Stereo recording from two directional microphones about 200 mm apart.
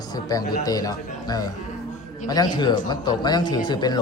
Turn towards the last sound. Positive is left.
turn(degrees=20)  # may be behind; listen again after turning